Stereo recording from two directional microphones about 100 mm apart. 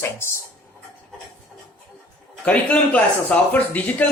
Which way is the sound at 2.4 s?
15° left (ahead or behind).